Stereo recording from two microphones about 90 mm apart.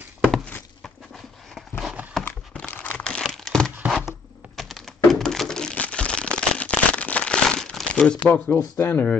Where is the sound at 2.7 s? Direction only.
20° left (ahead or behind).